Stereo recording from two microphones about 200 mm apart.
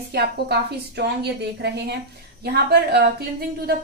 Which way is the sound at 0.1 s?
55° right (ahead or behind).